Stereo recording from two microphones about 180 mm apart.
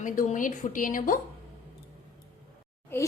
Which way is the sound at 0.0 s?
45° left (ahead or behind).